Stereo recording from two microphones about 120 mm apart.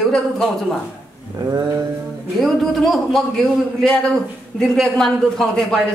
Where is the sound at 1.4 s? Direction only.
35° right (ahead or behind).